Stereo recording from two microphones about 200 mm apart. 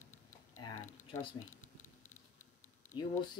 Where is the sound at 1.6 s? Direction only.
40° left (ahead or behind).